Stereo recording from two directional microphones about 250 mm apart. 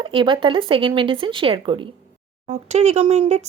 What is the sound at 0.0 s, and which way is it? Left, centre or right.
Speech, centre.